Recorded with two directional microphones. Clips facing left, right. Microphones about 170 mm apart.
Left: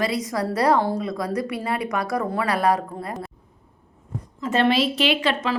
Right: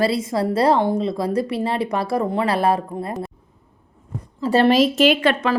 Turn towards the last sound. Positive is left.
turn(degrees=-55)  # may be behind; listen again after turning